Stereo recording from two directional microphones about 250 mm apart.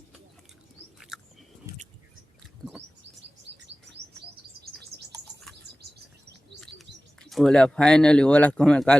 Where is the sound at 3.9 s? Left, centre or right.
Right.